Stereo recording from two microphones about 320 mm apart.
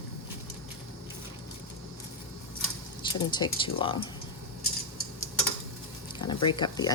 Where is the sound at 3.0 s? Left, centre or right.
Centre.